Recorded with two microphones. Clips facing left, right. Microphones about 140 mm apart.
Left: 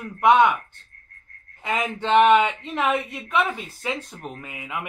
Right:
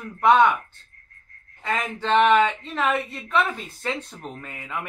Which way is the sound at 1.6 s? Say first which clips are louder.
Left 1 dB; 15° left (ahead or behind).